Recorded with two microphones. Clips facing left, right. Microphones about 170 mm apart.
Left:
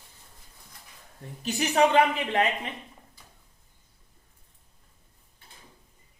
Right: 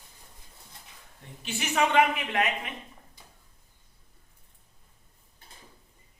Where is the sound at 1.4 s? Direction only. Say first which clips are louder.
Left 5 dB; 40° left (ahead or behind).